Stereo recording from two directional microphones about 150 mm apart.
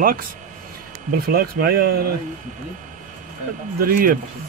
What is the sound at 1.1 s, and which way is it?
Speech, 80° right.